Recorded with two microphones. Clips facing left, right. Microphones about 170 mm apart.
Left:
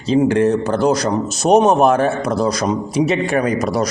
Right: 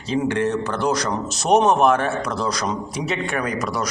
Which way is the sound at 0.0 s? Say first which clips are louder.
Left 7 dB; 25° left (ahead or behind).